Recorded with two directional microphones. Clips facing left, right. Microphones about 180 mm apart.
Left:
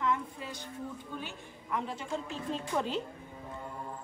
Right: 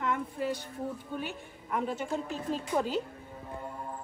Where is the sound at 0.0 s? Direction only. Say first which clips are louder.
Right 2 dB; 55° right (ahead or behind).